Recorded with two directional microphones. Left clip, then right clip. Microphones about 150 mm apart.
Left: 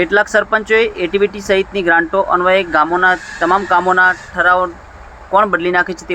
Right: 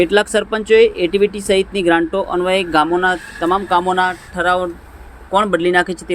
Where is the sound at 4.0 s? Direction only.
30° right (ahead or behind).